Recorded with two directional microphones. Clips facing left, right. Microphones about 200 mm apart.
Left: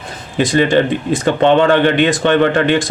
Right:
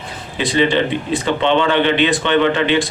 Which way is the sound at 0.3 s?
45° left (ahead or behind).